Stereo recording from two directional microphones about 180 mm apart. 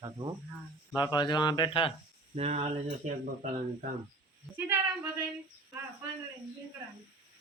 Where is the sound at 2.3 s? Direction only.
35° right (ahead or behind).